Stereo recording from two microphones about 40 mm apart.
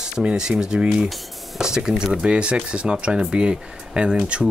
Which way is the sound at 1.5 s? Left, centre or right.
Centre.